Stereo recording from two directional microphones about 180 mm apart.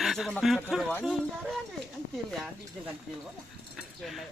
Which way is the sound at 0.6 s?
5° left (ahead or behind).